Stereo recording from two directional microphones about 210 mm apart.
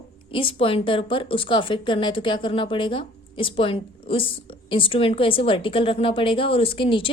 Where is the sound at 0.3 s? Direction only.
25° left (ahead or behind).